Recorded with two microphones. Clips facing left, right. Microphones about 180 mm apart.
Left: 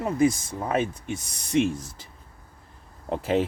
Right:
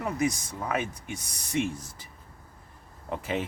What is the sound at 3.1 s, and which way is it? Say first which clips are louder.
Speech: left 7 dB; 35° left (ahead or behind).